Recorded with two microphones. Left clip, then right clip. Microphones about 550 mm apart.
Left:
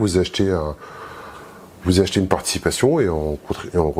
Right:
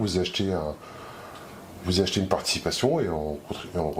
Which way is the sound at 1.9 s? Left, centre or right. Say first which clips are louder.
Left 7 dB; left.